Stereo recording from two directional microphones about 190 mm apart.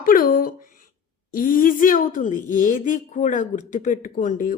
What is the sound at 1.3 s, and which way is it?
Speech, 50° left (ahead or behind).